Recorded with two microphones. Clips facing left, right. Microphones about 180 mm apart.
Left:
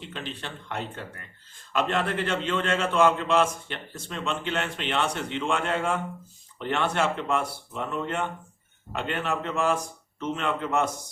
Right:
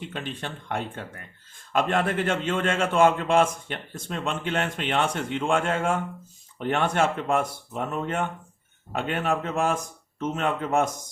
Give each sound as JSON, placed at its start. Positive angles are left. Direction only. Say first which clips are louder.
{"t": 0.1, "sound": "a man's voice", "louder": "right 3 dB", "side_deg": -50}